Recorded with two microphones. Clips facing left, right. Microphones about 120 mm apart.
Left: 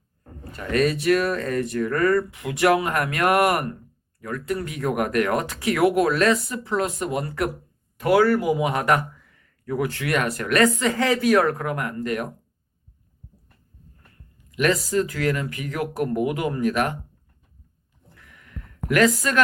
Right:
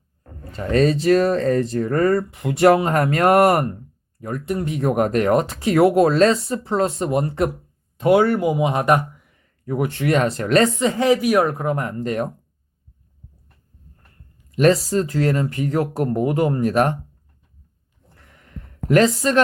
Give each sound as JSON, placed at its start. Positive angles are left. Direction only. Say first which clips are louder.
{"t": 0.5, "sound": "a man's voice", "louder": "right 4 dB", "side_deg": -30}
{"t": 14.5, "sound": "speech", "louder": "right 5 dB", "side_deg": -35}
{"t": 18.1, "sound": "a sound", "louder": "right 2 dB", "side_deg": -35}